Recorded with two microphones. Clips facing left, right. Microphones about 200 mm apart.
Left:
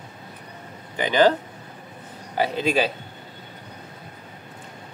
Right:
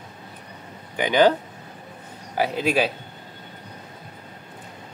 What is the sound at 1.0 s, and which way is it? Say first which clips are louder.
Speech: right 1 dB; 15° right (ahead or behind).